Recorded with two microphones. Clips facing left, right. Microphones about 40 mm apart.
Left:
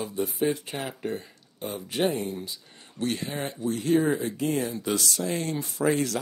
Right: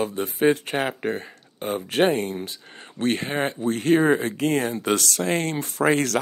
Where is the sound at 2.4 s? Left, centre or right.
Right.